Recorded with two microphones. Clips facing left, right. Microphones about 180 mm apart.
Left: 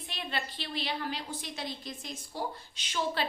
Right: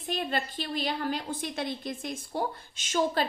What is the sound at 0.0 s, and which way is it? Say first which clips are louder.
A woman's voice: right 7 dB; 45° right (ahead or behind).